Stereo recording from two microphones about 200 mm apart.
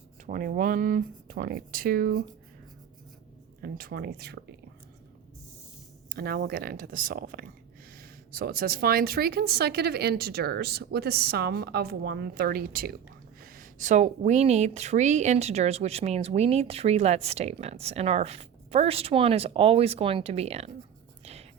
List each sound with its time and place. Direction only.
0.3 s speech: 45° right (ahead or behind)
3.6 s speech: 50° right (ahead or behind)
6.1 s speech: 50° right (ahead or behind); by 20.7 s 30° right (ahead or behind)